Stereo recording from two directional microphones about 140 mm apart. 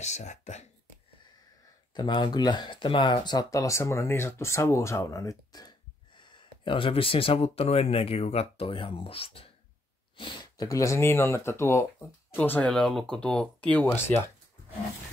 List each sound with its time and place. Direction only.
0.0 s speech: 55° left (ahead or behind)
2.0 s speech: 30° left (ahead or behind)
10.1 s speech: 30° left (ahead or behind)
12.4 s speech: 10° left (ahead or behind)